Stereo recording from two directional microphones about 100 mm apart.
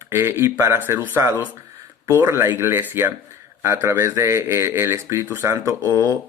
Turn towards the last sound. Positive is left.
turn(degrees=-30)  # may be behind; listen again after turning